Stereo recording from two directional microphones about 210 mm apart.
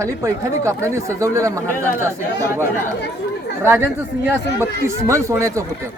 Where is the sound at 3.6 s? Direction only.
10° right (ahead or behind).